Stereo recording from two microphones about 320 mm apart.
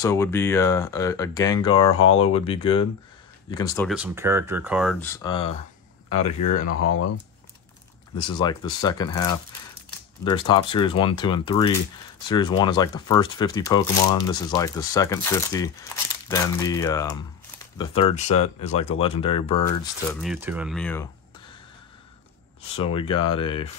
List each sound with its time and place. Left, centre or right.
0.0 s speech: centre
3.9 s speech: centre
6.7 s speech: left
8.2 s speech: centre
20.1 s speech: centre
22.9 s speech: centre